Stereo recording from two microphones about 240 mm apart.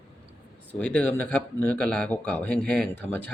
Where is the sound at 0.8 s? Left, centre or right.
Centre.